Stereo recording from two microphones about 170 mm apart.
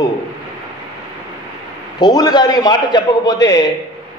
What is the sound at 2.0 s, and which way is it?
A man's voice, 25° left (ahead or behind).